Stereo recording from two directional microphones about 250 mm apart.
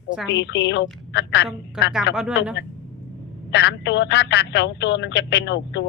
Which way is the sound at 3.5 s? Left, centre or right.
Left.